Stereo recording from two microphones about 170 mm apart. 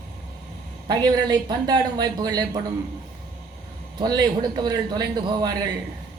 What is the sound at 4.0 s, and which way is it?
Speech, 25° right (ahead or behind).